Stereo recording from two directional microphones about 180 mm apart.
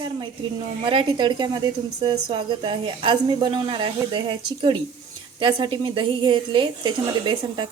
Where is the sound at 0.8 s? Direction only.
25° right (ahead or behind).